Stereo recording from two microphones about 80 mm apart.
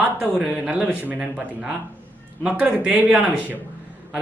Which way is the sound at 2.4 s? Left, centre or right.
Centre.